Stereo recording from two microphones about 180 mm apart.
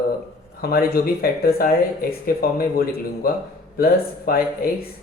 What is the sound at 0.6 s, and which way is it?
Speech, 60° left (ahead or behind).